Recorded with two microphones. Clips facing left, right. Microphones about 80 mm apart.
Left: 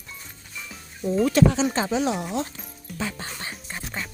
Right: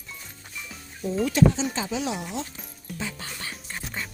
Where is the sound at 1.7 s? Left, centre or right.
Left.